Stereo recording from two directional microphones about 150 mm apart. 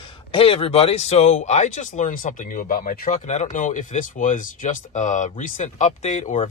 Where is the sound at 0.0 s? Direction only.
35° left (ahead or behind).